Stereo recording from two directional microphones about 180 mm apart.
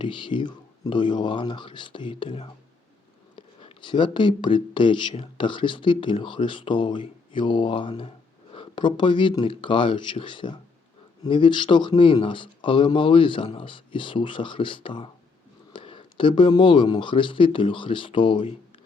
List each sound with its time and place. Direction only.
0.0 s speech: 25° left (ahead or behind)